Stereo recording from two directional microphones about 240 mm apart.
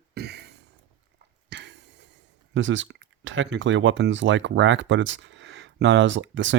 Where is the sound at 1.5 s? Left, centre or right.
Right.